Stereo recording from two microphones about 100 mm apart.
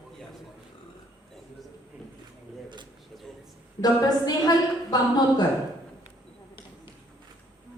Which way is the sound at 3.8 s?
40° left (ahead or behind).